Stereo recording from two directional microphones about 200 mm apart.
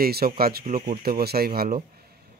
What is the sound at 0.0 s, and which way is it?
Speech, 50° right (ahead or behind).